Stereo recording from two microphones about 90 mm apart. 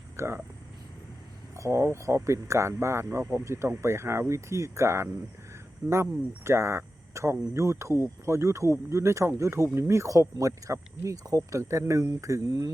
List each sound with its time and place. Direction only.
0.2 s speech: 30° right (ahead or behind)
1.5 s speech: 30° right (ahead or behind)